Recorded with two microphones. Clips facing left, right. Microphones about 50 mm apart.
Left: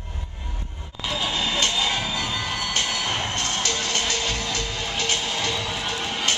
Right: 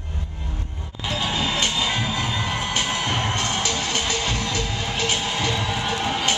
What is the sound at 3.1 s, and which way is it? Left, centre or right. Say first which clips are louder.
Music: right 2 dB; centre.